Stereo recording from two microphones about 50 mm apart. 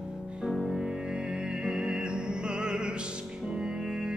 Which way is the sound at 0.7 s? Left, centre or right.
Centre.